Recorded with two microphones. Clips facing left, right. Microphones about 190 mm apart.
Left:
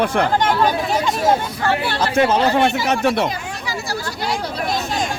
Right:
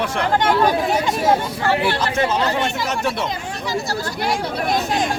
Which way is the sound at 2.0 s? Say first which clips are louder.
Left 3 dB; 55° left (ahead or behind).